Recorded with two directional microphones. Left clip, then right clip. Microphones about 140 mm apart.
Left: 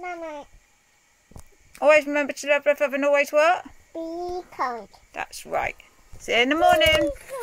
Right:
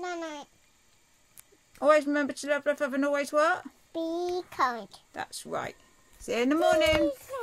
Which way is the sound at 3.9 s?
50° right (ahead or behind).